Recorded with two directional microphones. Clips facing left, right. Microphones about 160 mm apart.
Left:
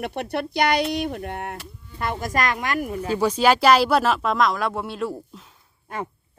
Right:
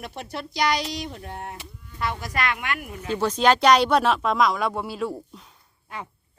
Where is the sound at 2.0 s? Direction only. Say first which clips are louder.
Left 3 dB; 50° left (ahead or behind).